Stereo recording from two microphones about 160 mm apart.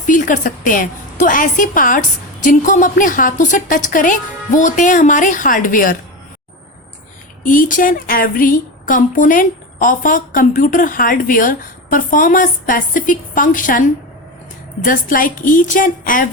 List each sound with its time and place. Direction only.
0.1 s a woman's voice: 55° left (ahead or behind)
7.4 s a woman's voice: 60° left (ahead or behind)
14.8 s a woman's voice: 60° left (ahead or behind)